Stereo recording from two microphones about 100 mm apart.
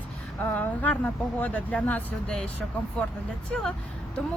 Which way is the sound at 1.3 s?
15° left (ahead or behind).